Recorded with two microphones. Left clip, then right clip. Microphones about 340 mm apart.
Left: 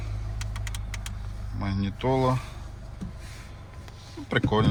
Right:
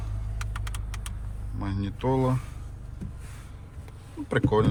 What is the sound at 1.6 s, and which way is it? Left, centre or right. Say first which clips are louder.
Speech: left 1 dB; centre.